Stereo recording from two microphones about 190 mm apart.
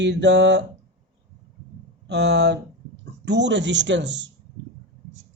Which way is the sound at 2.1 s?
65° right (ahead or behind).